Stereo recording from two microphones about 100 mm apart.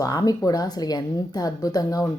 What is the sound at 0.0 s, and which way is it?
Speech, 40° left (ahead or behind).